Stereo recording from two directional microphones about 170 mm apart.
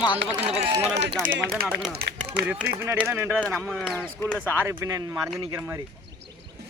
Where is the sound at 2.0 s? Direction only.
65° right (ahead or behind).